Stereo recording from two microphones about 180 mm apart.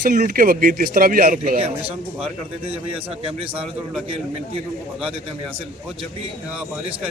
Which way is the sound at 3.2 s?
30° right (ahead or behind).